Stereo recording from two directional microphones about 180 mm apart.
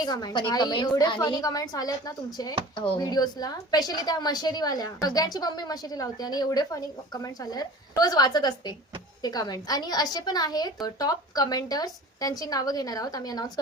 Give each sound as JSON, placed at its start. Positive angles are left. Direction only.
{"t": 0.0, "sound": "a woman's voice", "side_deg": 20}